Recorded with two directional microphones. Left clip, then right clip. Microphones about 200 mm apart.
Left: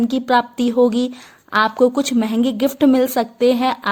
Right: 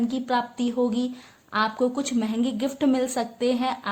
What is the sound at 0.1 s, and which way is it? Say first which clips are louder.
A woman's voice: left 9 dB; 35° left (ahead or behind).